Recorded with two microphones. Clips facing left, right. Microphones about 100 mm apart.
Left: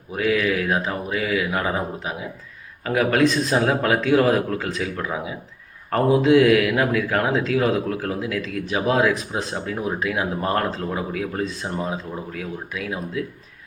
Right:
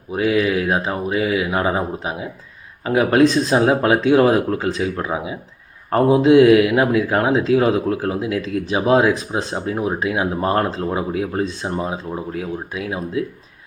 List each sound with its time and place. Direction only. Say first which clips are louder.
0.1 s speech: right 3 dB; 25° right (ahead or behind)